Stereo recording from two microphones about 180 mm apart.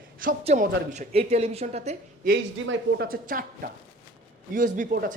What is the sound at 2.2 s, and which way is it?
Speech, 65° right (ahead or behind).